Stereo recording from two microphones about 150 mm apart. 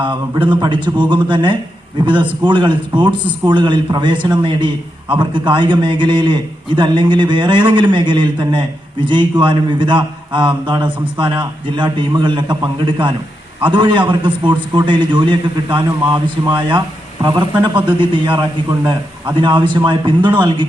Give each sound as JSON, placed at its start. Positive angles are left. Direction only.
{"t": 0.0, "sound": "a man's voice", "side_deg": -35}